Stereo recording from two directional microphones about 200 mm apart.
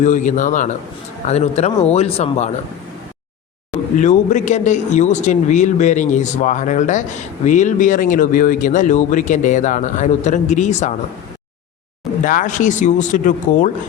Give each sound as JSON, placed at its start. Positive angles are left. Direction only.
{"t": 0.0, "sound": "speech", "side_deg": 40}
{"t": 3.9, "sound": "speech", "side_deg": 40}
{"t": 12.2, "sound": "speech", "side_deg": 40}